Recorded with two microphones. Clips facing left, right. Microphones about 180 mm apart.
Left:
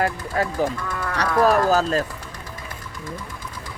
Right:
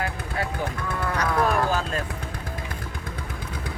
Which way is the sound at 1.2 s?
35° left (ahead or behind).